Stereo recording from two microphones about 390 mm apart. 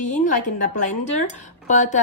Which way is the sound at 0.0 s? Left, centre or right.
Centre.